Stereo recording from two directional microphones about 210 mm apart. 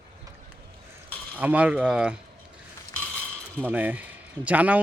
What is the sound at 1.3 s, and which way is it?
Speech, 5° right (ahead or behind).